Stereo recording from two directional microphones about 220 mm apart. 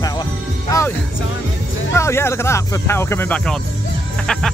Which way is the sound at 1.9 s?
10° left (ahead or behind).